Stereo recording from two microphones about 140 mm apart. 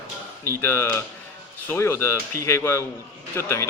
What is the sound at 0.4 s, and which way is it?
A man's voice, 15° left (ahead or behind).